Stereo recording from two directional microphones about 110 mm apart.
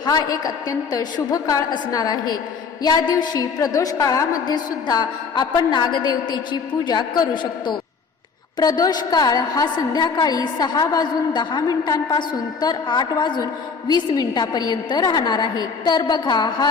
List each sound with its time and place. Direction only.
0.0 s a woman's voice: 40° left (ahead or behind)